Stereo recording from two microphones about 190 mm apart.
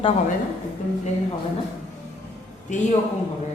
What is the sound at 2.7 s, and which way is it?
Speech, 40° left (ahead or behind).